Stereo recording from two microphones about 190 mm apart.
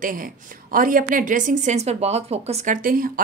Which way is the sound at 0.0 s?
45° right (ahead or behind).